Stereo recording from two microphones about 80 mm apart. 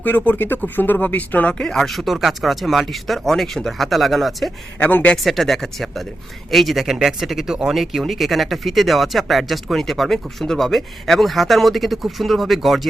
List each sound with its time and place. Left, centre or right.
0.0 s speech: left
1.7 s speech: centre
4.8 s speech: left
5.1 s speech: centre